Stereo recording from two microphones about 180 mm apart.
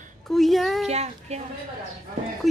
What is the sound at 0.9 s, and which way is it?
Speech, 35° right (ahead or behind).